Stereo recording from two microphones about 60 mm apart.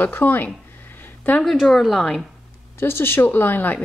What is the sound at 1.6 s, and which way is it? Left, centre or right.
Speech, centre.